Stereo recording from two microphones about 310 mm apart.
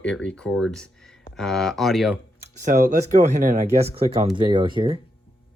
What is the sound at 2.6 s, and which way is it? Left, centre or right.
Speech, right.